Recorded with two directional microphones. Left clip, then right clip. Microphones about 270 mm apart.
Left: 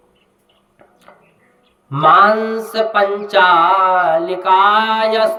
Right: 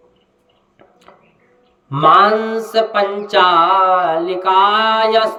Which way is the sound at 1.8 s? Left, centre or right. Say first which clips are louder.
Even; centre.